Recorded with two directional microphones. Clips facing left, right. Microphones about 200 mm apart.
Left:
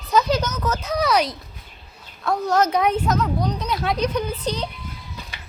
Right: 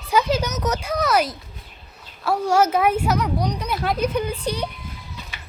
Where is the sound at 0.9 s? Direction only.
5° right (ahead or behind).